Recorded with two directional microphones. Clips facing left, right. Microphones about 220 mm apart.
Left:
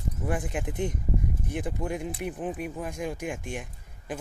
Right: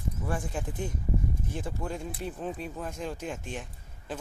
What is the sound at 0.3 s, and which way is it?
Speech, 20° left (ahead or behind).